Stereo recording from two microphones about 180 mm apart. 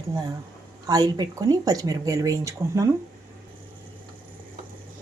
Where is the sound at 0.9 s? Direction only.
20° right (ahead or behind).